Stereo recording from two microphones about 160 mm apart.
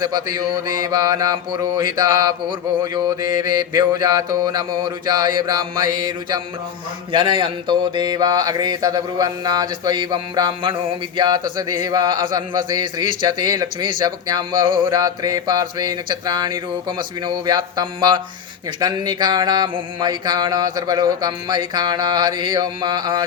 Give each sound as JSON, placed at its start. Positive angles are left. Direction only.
{"t": 0.0, "sound": "speech", "side_deg": -25}